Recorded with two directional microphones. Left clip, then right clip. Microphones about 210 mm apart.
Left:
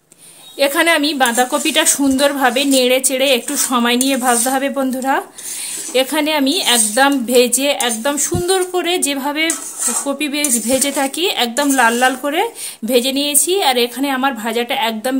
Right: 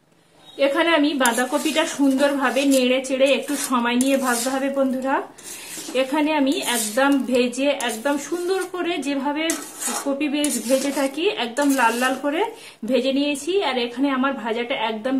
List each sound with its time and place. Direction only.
0.6 s a woman's voice: 55° left (ahead or behind)